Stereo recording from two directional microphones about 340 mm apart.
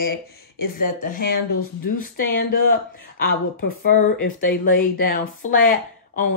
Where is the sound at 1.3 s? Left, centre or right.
Left.